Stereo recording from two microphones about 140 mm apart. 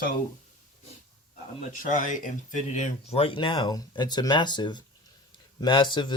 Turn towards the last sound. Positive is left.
turn(degrees=35)  # may be behind; listen again after turning